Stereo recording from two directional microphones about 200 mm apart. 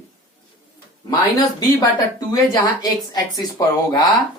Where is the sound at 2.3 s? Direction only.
20° left (ahead or behind).